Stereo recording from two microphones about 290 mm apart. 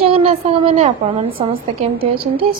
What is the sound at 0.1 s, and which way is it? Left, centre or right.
A woman's voice, centre.